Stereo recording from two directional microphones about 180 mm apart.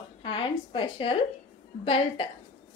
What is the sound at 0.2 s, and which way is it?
A woman's voice, 30° left (ahead or behind).